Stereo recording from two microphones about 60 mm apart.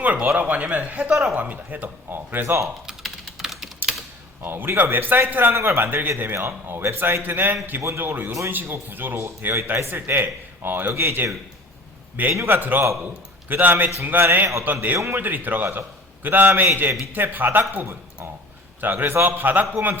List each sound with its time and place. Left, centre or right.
0.0 s speech: right
1.1 s speech: centre
1.4 s speech: right
2.1 s a man's voice: right
2.8 s typing: centre
4.4 s a man's voice: right
5.5 s a man's voice: right
8.3 s a man's voice: right
8.9 s a man's voice: right
12.5 s a man's voice: right
14.6 s a man's voice: right
14.9 s a man's voice: right
15.2 s a man's voice: right